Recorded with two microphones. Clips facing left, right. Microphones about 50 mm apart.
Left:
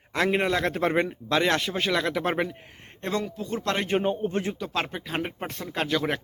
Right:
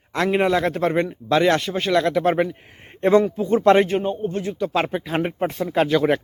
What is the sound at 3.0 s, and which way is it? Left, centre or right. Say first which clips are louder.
Speech: right 13 dB; right.